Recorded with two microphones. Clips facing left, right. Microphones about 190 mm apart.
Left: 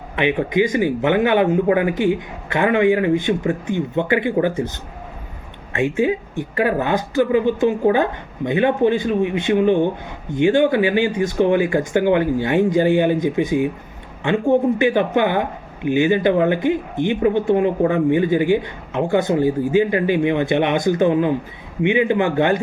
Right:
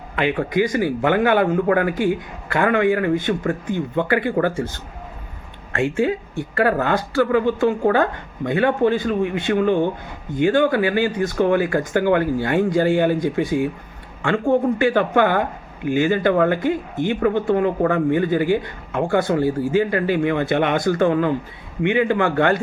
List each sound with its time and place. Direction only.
0.2 s speech: 20° left (ahead or behind)
5.7 s speech: 15° left (ahead or behind)